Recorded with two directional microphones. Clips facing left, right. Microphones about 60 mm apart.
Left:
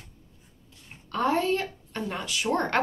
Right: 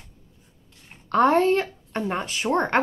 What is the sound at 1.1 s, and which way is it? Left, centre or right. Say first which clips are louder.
Speech: right 7 dB; right.